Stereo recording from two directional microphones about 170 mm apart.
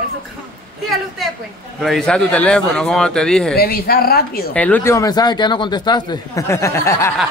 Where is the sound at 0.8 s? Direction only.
Centre (ahead or behind).